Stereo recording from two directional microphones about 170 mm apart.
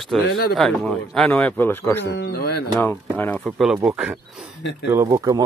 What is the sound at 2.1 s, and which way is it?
Speech, 90° left.